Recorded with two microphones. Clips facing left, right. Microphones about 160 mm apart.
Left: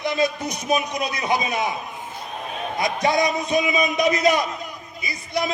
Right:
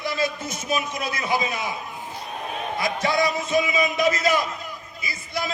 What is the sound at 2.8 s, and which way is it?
A man's voice, 20° left (ahead or behind).